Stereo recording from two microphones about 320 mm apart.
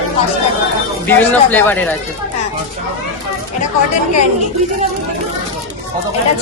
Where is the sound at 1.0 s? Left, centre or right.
Centre.